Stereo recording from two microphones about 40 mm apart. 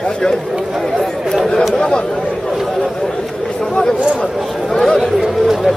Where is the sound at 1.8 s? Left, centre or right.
Centre.